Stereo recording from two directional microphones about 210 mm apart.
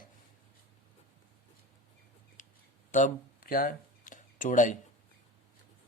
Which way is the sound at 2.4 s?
35° left (ahead or behind).